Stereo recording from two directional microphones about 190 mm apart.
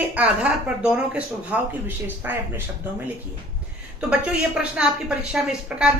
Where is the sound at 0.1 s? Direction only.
5° right (ahead or behind).